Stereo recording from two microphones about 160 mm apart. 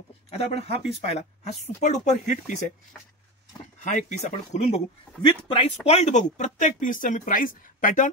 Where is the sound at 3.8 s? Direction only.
50° left (ahead or behind).